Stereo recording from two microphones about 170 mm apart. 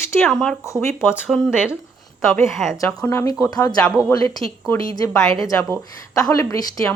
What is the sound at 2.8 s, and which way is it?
A woman's voice, 15° left (ahead or behind).